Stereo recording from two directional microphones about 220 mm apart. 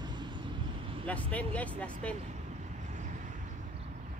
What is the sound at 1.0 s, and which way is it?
Speech, 5° left (ahead or behind).